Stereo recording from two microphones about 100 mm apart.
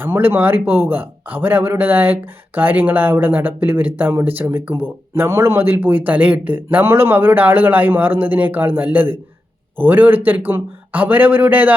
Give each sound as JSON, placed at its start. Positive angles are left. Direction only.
{"t": 0.0, "sound": "speech", "side_deg": -20}